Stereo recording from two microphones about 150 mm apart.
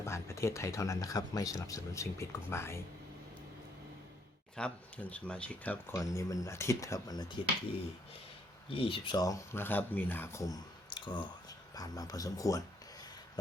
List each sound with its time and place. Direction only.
0.0 s speech: 20° left (ahead or behind)
4.5 s speech: 10° left (ahead or behind); by 7.3 s 25° left (ahead or behind)
8.7 s speech: 35° left (ahead or behind)
9.2 s speech: 20° left (ahead or behind)